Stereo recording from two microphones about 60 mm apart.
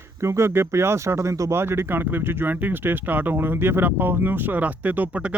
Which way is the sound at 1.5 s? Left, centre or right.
Right.